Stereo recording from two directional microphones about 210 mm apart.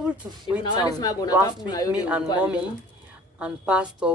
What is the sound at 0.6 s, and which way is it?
Speech, 20° left (ahead or behind).